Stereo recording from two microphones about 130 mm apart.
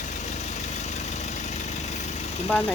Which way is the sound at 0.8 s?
60° left (ahead or behind).